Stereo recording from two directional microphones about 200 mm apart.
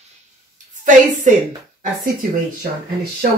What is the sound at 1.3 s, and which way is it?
Speech, 40° right (ahead or behind).